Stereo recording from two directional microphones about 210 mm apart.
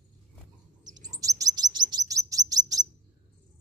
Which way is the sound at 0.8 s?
15° right (ahead or behind).